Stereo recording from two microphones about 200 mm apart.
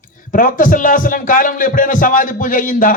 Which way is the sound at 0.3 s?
40° left (ahead or behind).